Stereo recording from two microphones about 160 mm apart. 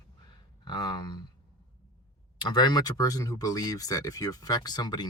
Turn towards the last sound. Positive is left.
turn(degrees=25)  # may be behind; listen again after turning